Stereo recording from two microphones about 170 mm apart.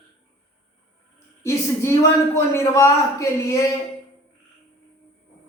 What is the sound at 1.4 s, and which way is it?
A man's voice, 15° left (ahead or behind).